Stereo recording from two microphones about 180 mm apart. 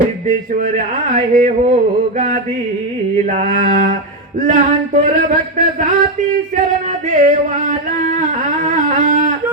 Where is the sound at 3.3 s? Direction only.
45° right (ahead or behind).